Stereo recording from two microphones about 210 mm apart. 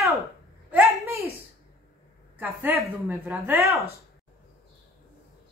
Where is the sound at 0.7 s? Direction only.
10° right (ahead or behind).